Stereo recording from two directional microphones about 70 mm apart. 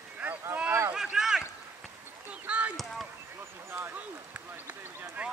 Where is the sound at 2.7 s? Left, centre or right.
Centre.